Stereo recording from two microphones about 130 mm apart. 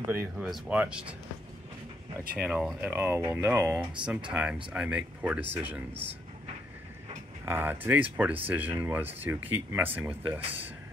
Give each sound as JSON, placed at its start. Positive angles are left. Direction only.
{"t": 0.1, "sound": "speech", "side_deg": -15}
{"t": 0.5, "sound": "speech", "side_deg": -5}
{"t": 2.3, "sound": "speech", "side_deg": -10}
{"t": 7.4, "sound": "speech", "side_deg": -15}